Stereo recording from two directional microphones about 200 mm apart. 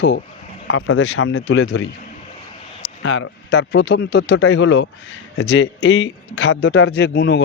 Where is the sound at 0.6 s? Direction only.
80° left.